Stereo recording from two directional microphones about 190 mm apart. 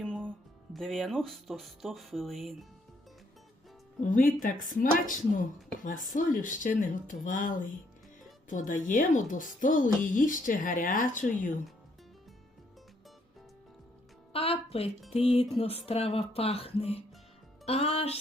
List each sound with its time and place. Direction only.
0.7 s speech: centre (ahead or behind)
4.0 s speech: 45° left (ahead or behind)
14.3 s music: 30° left (ahead or behind)
15.4 s speech: 30° left (ahead or behind)